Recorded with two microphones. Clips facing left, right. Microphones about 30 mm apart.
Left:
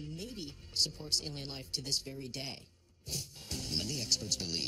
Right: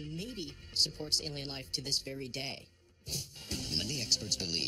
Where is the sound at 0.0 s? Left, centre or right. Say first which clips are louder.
Right 2 dB; right.